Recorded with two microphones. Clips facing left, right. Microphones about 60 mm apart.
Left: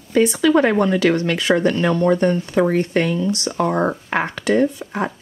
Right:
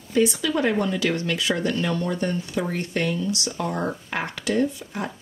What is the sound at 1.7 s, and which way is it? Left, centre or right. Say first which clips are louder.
Speech: left 8 dB; left.